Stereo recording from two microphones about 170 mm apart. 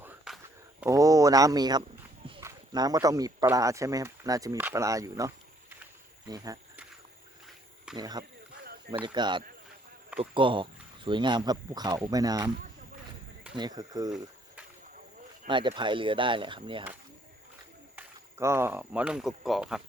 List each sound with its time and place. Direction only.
0.3 s a sound: 5° right (ahead or behind)
0.9 s speech: 20° right (ahead or behind)
7.9 s speech: 25° right (ahead or behind)
13.6 s speech: 25° right (ahead or behind)
15.4 s speech: 30° right (ahead or behind)
17.9 s speech: 15° right (ahead or behind)